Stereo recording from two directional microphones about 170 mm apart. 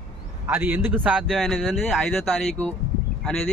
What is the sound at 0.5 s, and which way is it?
Speech, 10° right (ahead or behind).